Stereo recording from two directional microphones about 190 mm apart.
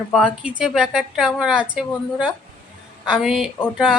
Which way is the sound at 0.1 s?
5° right (ahead or behind).